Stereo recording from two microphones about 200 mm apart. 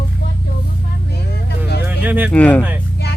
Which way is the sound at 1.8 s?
10° right (ahead or behind).